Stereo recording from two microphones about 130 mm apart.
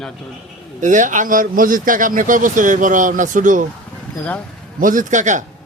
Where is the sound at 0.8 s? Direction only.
75° right (ahead or behind).